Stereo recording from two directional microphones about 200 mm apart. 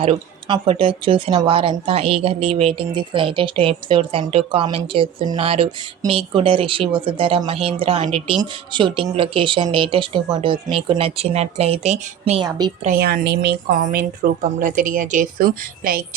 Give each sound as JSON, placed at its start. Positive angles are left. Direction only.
{"t": 0.0, "sound": "speech", "side_deg": -25}
{"t": 12.8, "sound": "a woman's voice", "side_deg": -45}